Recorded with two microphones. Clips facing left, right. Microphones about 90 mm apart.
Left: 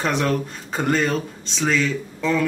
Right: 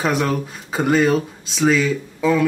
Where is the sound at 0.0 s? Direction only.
5° right (ahead or behind).